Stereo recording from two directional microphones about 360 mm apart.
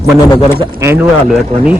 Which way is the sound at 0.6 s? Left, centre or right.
Centre.